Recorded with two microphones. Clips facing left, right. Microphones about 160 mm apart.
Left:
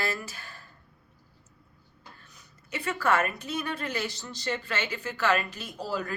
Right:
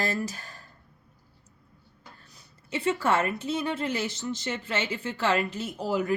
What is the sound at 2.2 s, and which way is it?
A woman's voice, 30° right (ahead or behind).